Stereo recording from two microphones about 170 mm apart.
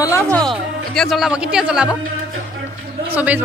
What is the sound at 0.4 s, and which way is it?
Speech, centre (ahead or behind).